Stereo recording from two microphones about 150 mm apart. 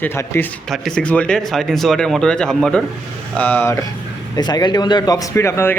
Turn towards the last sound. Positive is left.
turn(degrees=15)  # may be behind; listen again after turning